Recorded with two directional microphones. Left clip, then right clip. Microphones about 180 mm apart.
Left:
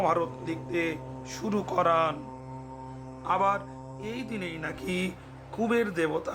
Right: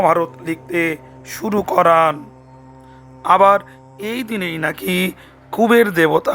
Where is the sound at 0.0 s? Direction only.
40° right (ahead or behind).